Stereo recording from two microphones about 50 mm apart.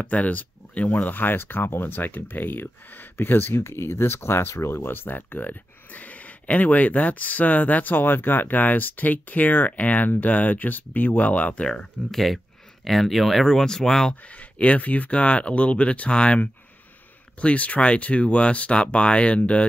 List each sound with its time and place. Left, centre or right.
0.0 s speech: left
11.7 s speech: centre
12.8 s speech: centre
14.2 s speech: left